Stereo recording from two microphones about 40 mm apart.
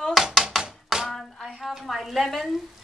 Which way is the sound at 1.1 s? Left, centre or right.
Centre.